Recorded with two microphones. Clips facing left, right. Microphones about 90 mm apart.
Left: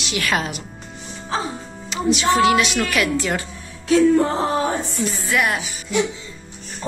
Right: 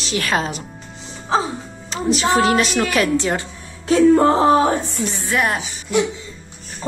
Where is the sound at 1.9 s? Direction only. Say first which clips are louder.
Even; 40° right (ahead or behind).